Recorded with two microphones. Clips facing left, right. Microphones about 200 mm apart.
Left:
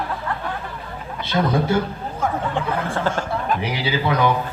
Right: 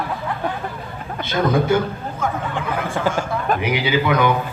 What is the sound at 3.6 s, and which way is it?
Speech, 35° left (ahead or behind).